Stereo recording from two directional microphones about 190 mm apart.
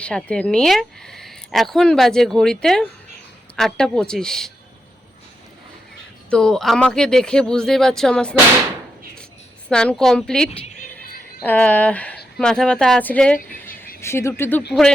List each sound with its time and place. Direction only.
0.0 s a woman's voice: 5° left (ahead or behind)
6.3 s a woman's voice: 5° left (ahead or behind)
9.6 s a woman's voice: 5° left (ahead or behind)